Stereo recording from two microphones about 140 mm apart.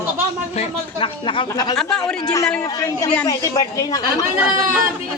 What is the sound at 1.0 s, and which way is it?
Speech, 35° left (ahead or behind).